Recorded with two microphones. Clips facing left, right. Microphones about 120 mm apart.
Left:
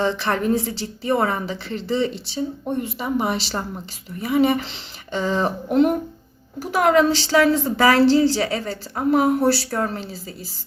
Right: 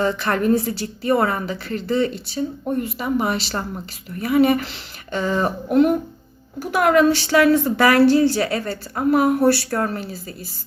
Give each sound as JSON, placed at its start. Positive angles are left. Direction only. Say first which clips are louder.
{"t": 0.0, "sound": "speech", "louder": "right 1 dB", "side_deg": 25}
{"t": 6.6, "sound": "speech", "louder": "right 1 dB", "side_deg": 25}